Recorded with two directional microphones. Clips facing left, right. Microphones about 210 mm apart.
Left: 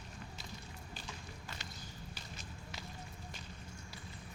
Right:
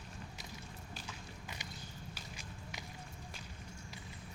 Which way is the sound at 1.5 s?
15° right (ahead or behind).